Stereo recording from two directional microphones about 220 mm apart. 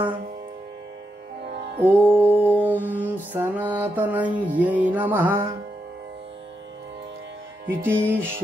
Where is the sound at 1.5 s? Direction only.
50° right (ahead or behind).